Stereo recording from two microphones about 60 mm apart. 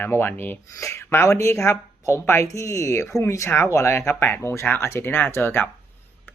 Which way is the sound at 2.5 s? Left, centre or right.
Left.